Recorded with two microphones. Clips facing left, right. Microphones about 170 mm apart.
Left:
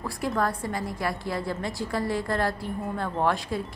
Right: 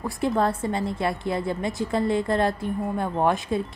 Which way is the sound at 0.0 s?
20° right (ahead or behind).